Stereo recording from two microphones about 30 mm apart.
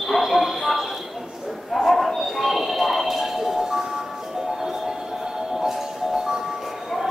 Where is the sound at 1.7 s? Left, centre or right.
Centre.